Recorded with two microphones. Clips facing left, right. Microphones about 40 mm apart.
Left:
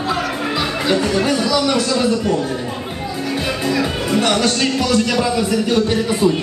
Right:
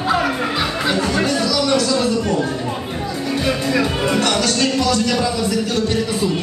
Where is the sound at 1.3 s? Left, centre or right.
Centre.